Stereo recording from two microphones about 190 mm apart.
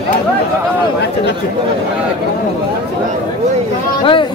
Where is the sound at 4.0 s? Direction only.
25° left (ahead or behind).